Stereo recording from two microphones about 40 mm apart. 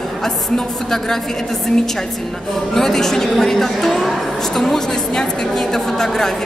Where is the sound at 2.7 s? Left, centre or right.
Centre.